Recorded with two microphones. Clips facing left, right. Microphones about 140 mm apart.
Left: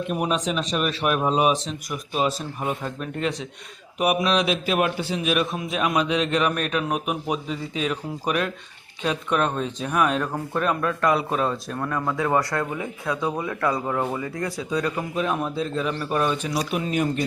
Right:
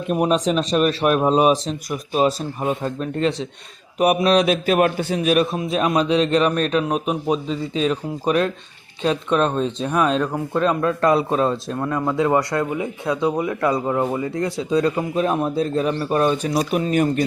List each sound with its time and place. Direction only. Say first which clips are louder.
0.1 s a man's voice: right 8 dB; 35° right (ahead or behind)
2.6 s a man's voice: right 5 dB; 25° right (ahead or behind)
11.7 s speech: right 4 dB; 20° right (ahead or behind)
15.2 s a man's voice: right 5 dB; 40° right (ahead or behind)